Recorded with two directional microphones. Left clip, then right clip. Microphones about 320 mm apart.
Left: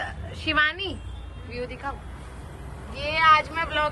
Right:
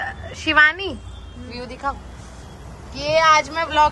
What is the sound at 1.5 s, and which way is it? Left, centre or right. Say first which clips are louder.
Speech: right 5 dB; centre.